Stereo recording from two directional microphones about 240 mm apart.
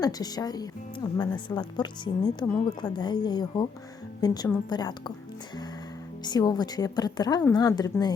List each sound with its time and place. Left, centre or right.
0.0 s a woman's voice: centre
6.2 s a woman's voice: centre